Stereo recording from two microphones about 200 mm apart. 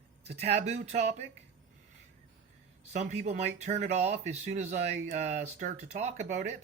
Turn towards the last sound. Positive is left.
turn(degrees=-35)  # may be behind; listen again after turning